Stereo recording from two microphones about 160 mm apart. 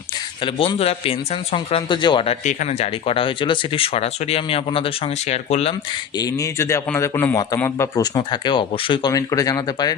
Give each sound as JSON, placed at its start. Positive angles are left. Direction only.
{"t": 0.4, "sound": "a man's voice", "side_deg": 35}
{"t": 6.1, "sound": "speech", "side_deg": 20}